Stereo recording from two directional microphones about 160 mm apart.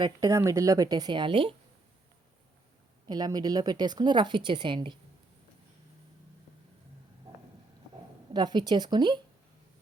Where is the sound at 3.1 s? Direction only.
25° right (ahead or behind).